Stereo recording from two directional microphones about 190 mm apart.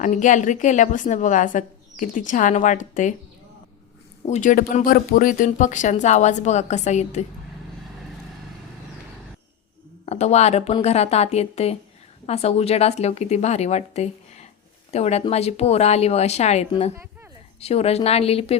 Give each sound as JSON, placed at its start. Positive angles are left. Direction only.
{"t": 0.0, "sound": "a woman's voice", "side_deg": 40}
{"t": 4.3, "sound": "a woman's voice", "side_deg": 40}
{"t": 10.1, "sound": "a woman's voice", "side_deg": 35}